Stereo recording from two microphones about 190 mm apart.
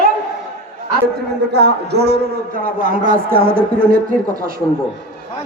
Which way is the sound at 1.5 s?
60° right (ahead or behind).